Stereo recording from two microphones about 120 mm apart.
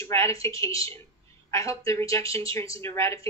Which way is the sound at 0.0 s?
25° left (ahead or behind).